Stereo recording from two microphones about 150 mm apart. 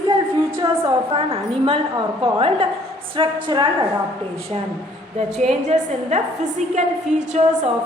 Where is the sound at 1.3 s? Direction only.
40° right (ahead or behind).